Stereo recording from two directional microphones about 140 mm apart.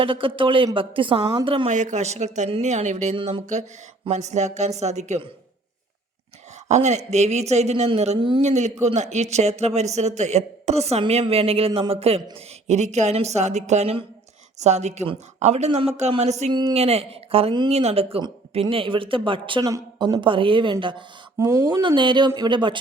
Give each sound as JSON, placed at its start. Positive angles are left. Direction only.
{"t": 0.0, "sound": "speech", "side_deg": -40}
{"t": 1.7, "sound": "a man's voice", "side_deg": -60}
{"t": 6.7, "sound": "a man's voice", "side_deg": -55}
{"t": 12.6, "sound": "a man's voice", "side_deg": -55}
{"t": 16.5, "sound": "speech", "side_deg": -35}
{"t": 16.7, "sound": "a man's voice", "side_deg": -45}
{"t": 17.7, "sound": "speech", "side_deg": -50}
{"t": 19.6, "sound": "speech", "side_deg": -25}
{"t": 20.2, "sound": "speech", "side_deg": -35}
{"t": 21.3, "sound": "speech", "side_deg": -20}
{"t": 21.8, "sound": "speech", "side_deg": -35}